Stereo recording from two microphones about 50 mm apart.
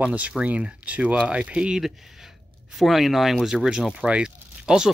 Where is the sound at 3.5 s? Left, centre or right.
Centre.